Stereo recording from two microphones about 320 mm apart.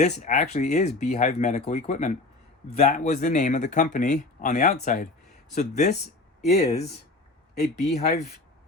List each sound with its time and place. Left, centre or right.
0.0 s speech: left